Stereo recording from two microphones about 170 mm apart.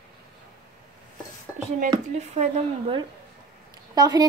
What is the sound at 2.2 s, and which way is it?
Speech, 40° right (ahead or behind).